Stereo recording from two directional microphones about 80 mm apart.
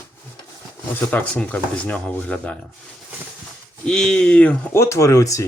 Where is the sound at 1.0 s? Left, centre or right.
Centre.